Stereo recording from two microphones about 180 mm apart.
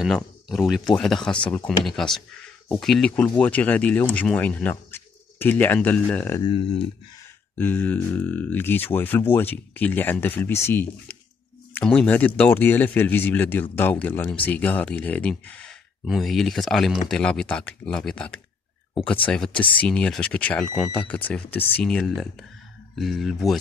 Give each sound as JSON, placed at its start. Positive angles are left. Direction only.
{"t": 0.0, "sound": "speech", "side_deg": 0}
{"t": 6.4, "sound": "speech", "side_deg": 30}
{"t": 7.5, "sound": "speech", "side_deg": 10}